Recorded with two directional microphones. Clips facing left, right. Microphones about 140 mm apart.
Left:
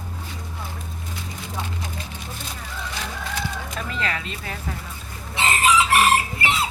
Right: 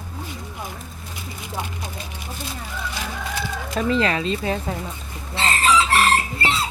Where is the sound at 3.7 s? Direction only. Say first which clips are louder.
Right 11 dB; 30° right (ahead or behind).